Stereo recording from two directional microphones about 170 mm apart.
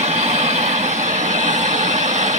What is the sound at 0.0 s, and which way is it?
Vehicle, 40° right (ahead or behind).